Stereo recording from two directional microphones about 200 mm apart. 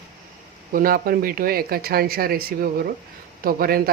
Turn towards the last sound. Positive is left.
turn(degrees=-45)  # may be behind; listen again after turning